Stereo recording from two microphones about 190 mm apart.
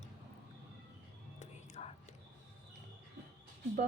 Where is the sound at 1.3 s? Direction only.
35° left (ahead or behind).